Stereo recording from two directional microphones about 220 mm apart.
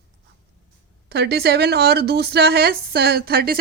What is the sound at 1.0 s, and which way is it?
A woman's voice, 45° right (ahead or behind).